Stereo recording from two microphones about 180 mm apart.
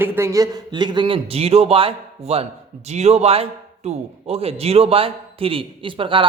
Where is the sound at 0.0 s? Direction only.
15° right (ahead or behind).